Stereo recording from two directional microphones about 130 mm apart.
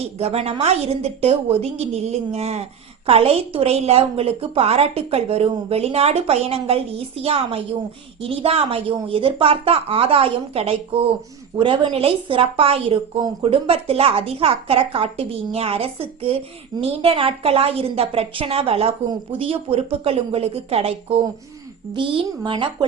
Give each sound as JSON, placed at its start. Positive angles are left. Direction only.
{"t": 0.0, "sound": "a woman's voice", "side_deg": -50}